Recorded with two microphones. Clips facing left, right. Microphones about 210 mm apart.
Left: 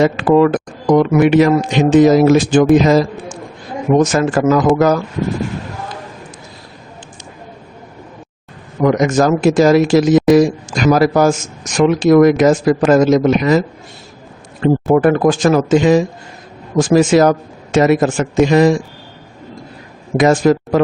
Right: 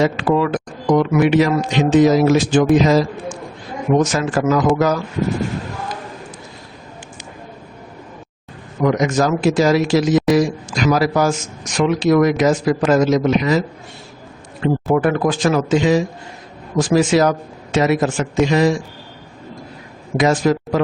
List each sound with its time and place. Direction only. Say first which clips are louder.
0.0 s speech: left 5 dB; 50° left (ahead or behind)
4.0 s speech: left 4 dB; 50° left (ahead or behind)
8.8 s speech: left 4 dB; 50° left (ahead or behind)
14.6 s speech: left 5 dB; 45° left (ahead or behind)
20.1 s speech: left 4 dB; 50° left (ahead or behind)